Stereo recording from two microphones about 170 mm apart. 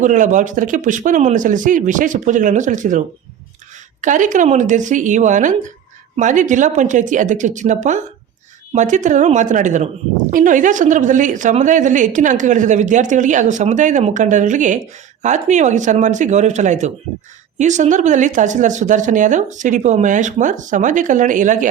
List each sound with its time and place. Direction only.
0.0 s a woman's voice: 45° right (ahead or behind)
4.0 s a woman's voice: 50° right (ahead or behind)